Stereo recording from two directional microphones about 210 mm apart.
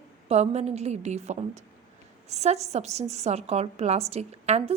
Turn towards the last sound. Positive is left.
turn(degrees=-30)  # may be behind; listen again after turning